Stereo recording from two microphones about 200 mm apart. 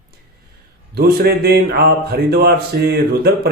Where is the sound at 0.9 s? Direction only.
50° right (ahead or behind).